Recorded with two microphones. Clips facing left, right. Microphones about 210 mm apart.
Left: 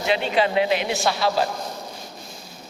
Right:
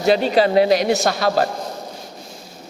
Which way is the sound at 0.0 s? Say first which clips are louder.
Right 6 dB; 40° right (ahead or behind).